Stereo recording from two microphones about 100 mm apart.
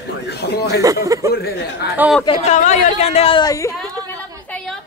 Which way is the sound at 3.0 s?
90° left.